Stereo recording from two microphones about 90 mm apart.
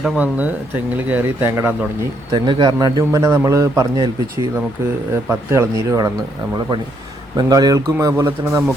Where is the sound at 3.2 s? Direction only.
30° right (ahead or behind).